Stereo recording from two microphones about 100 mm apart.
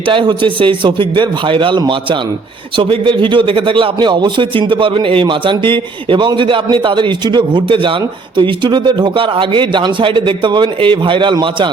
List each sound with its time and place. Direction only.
0.0 s speech: 55° right (ahead or behind)